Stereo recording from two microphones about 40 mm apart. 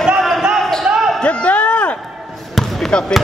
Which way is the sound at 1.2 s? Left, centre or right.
Left.